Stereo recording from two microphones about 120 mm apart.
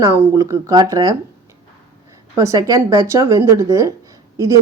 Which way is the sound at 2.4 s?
30° right (ahead or behind).